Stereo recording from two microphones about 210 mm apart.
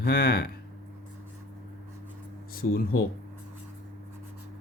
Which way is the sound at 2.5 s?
45° left (ahead or behind).